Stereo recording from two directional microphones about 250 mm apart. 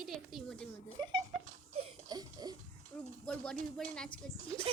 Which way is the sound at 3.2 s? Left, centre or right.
Centre.